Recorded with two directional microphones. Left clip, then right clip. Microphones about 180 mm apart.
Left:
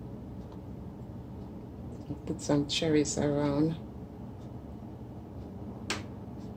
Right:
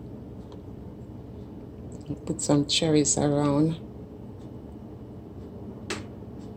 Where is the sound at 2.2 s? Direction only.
25° right (ahead or behind).